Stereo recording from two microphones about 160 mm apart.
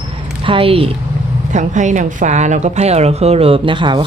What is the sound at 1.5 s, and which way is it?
A woman's voice, 50° right (ahead or behind).